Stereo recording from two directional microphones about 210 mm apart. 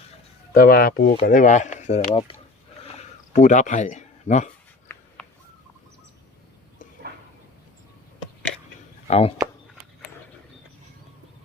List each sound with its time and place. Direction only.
0.5 s speech: 45° left (ahead or behind); by 2.3 s 30° left (ahead or behind)
3.3 s speech: 35° left (ahead or behind)
5.2 s a sound: 5° left (ahead or behind)
9.0 s speech: 30° left (ahead or behind)